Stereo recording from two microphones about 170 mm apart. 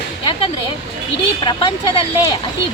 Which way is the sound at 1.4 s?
30° left (ahead or behind).